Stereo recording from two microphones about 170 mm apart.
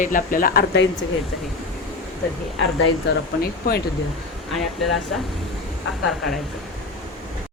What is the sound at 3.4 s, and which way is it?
Speech, 65° left (ahead or behind).